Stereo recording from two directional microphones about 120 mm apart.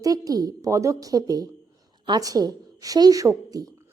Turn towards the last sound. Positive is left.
turn(degrees=-30)  # may be behind; listen again after turning